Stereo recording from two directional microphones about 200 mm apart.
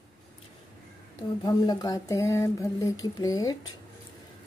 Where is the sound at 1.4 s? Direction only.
20° left (ahead or behind).